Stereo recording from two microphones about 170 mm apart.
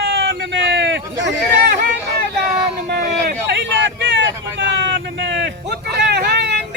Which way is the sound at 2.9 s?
85° right.